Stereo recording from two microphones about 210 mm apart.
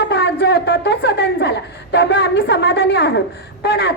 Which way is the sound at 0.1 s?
55° left (ahead or behind).